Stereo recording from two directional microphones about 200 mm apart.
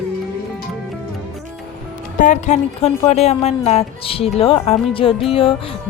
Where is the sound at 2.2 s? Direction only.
35° left (ahead or behind).